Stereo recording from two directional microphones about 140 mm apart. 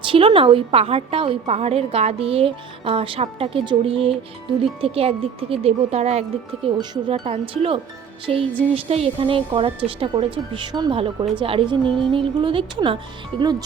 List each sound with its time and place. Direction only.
0.0 s a woman's voice: 35° right (ahead or behind)